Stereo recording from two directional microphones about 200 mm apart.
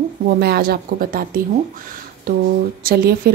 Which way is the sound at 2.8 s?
50° right (ahead or behind).